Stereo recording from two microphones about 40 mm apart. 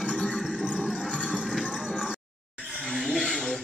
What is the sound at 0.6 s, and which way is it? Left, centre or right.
Music, right.